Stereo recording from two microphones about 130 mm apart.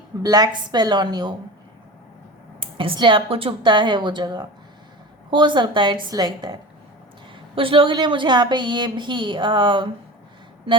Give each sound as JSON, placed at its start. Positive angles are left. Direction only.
{"t": 0.2, "sound": "a woman's voice", "side_deg": -30}
{"t": 2.6, "sound": "a woman's voice", "side_deg": -40}